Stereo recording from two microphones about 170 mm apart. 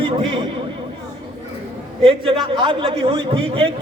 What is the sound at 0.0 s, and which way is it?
Speech, 30° right (ahead or behind).